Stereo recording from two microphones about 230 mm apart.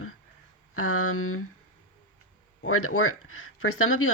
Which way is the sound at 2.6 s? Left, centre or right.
Left.